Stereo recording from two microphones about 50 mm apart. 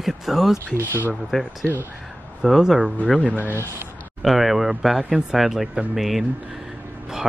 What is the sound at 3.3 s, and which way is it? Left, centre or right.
Speech, right.